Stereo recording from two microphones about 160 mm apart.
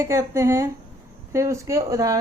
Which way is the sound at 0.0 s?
20° right (ahead or behind).